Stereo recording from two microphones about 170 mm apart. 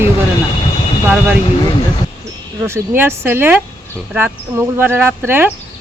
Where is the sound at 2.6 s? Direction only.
15° right (ahead or behind).